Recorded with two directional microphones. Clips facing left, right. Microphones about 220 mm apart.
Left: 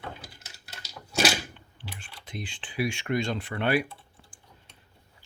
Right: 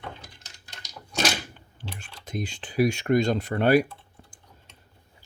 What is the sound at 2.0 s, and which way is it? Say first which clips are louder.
Speech: right 7 dB; 45° right (ahead or behind).